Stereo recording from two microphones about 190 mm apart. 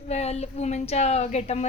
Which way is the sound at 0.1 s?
35° left (ahead or behind).